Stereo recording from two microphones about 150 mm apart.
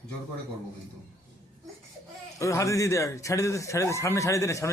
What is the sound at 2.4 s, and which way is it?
A man's voice, 20° left (ahead or behind).